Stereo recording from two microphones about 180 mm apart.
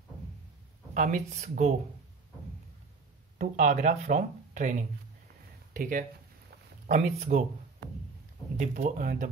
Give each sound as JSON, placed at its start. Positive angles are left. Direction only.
{"t": 0.9, "sound": "speech", "side_deg": -50}
{"t": 3.3, "sound": "speech", "side_deg": -45}
{"t": 8.5, "sound": "speech", "side_deg": -45}